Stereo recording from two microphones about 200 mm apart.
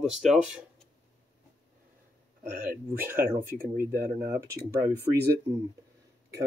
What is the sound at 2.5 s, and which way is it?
Speech, 45° right (ahead or behind).